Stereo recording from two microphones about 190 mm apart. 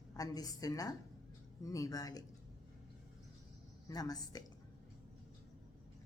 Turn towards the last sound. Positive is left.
turn(degrees=20)  # may be behind; listen again after turning